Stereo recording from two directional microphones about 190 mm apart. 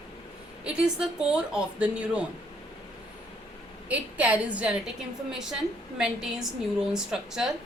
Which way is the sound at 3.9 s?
5° right (ahead or behind).